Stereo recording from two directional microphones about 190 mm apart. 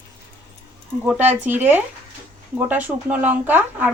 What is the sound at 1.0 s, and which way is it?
Speech, 5° right (ahead or behind).